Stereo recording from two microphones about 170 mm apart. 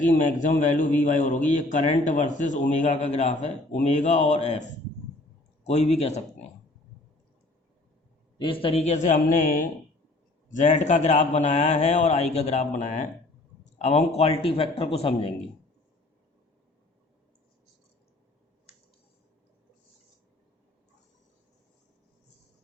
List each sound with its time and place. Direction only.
0.0 s a man's voice: 45° left (ahead or behind)
8.4 s a man's voice: 30° left (ahead or behind)